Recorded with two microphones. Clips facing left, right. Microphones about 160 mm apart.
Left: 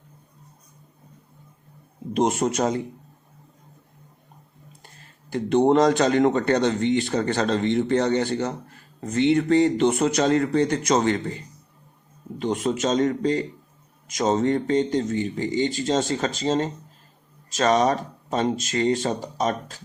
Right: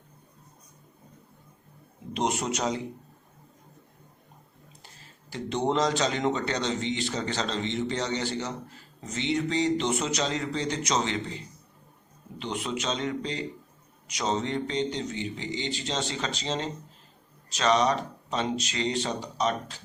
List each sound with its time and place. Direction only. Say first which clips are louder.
2.1 s speech: left 7 dB; 50° left (ahead or behind)
5.3 s speech: left 9 dB; 55° left (ahead or behind)